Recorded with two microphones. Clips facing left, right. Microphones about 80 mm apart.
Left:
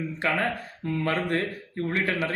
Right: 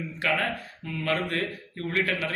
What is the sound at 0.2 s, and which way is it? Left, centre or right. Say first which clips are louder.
Speech: left 1 dB; left.